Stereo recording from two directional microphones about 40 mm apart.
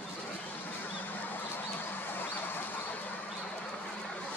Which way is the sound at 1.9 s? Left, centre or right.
Left.